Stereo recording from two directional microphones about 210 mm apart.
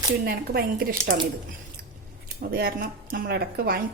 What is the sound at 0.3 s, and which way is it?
Speech, 45° right (ahead or behind).